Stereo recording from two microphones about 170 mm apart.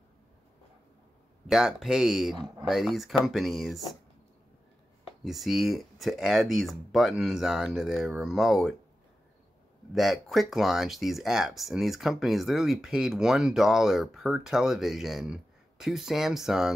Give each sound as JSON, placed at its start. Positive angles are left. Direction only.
{"t": 1.5, "sound": "speech", "side_deg": 0}
{"t": 5.2, "sound": "speech", "side_deg": 0}
{"t": 9.9, "sound": "speech", "side_deg": 0}